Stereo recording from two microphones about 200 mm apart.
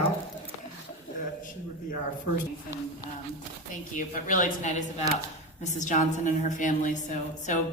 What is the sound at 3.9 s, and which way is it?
A woman's voice, 40° left (ahead or behind).